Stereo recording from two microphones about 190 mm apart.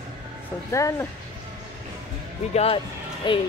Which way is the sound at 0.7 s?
15° left (ahead or behind).